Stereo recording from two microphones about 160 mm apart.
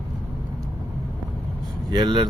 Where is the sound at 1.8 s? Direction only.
30° right (ahead or behind).